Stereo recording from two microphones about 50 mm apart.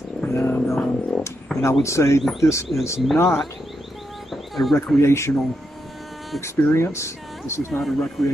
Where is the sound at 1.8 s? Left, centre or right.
Left.